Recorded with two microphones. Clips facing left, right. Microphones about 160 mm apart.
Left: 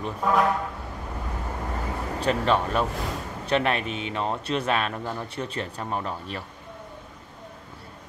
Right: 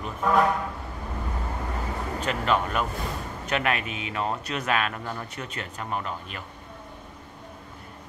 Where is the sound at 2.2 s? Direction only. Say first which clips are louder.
Left 3 dB; 35° left (ahead or behind).